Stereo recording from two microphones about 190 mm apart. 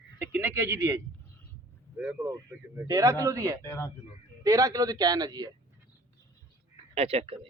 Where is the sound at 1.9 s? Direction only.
10° right (ahead or behind).